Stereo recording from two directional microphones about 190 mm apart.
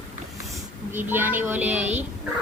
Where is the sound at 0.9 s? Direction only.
10° right (ahead or behind).